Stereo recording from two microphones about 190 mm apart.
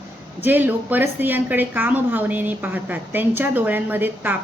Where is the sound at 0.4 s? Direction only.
10° right (ahead or behind).